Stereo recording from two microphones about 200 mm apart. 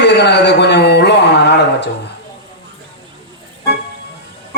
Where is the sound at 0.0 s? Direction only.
60° left (ahead or behind).